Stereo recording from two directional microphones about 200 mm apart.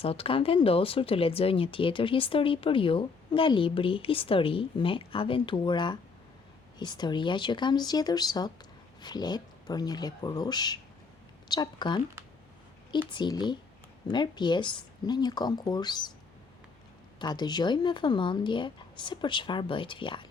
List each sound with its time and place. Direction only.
0.0 s speech: 30° left (ahead or behind)
17.2 s speech: 20° left (ahead or behind)